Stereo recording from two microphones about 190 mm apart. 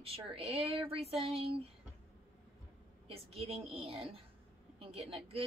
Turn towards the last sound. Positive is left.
turn(degrees=-30)  # may be behind; listen again after turning